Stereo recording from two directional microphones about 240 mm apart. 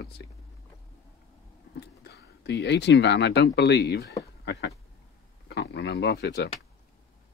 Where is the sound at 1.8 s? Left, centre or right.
Left.